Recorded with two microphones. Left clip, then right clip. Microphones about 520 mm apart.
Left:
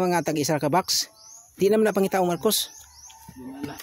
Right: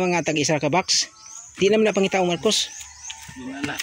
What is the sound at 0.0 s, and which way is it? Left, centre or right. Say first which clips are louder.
Speech: right 2 dB; left.